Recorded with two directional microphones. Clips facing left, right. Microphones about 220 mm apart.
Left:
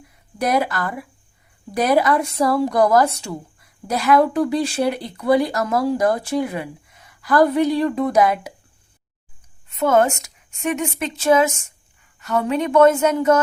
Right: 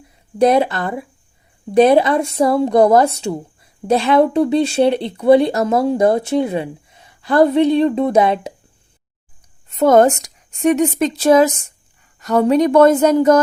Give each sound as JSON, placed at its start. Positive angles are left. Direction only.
{"t": 0.3, "sound": "speech", "side_deg": -25}
{"t": 9.6, "sound": "a woman's voice", "side_deg": -35}